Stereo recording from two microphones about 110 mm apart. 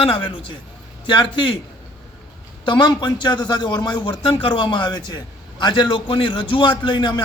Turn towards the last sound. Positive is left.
turn(degrees=45)  # may be behind; listen again after turning